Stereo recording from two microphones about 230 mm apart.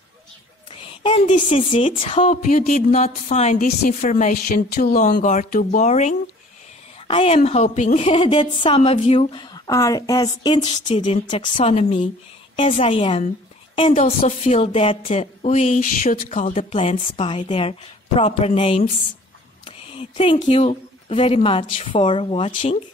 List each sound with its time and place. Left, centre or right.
0.7 s a woman's voice: left